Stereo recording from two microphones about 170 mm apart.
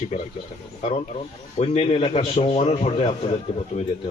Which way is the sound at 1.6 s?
35° left (ahead or behind).